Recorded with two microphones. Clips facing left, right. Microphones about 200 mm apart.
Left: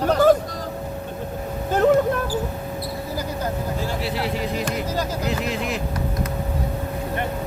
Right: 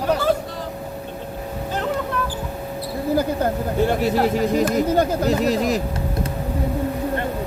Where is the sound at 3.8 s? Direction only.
50° right (ahead or behind).